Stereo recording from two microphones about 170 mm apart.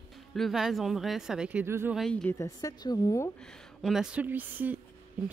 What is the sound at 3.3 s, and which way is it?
A woman's voice, 5° left (ahead or behind).